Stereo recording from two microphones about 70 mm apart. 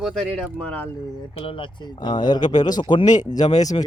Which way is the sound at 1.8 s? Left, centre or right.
Left.